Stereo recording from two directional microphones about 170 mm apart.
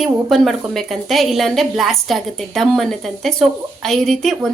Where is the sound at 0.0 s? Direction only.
Centre (ahead or behind).